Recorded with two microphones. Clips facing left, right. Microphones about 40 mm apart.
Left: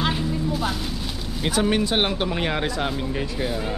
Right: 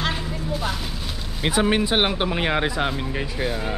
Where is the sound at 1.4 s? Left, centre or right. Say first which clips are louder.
Right 1 dB; centre.